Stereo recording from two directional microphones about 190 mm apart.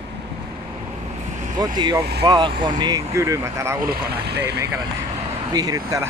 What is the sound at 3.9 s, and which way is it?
Speech, 60° right (ahead or behind).